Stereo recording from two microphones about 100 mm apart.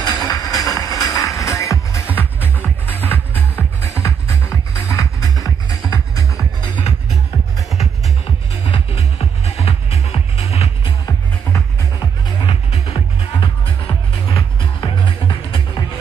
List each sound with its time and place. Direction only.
0.0 s music: 40° left (ahead or behind)
3.0 s music: 20° left (ahead or behind); by 6.4 s 35° left (ahead or behind)
6.6 s music: 50° left (ahead or behind)
8.6 s music: 80° left
12.4 s music: 85° left
14.6 s music: 55° left (ahead or behind)